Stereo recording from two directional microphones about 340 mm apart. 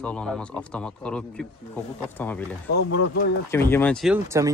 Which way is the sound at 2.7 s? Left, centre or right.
Left.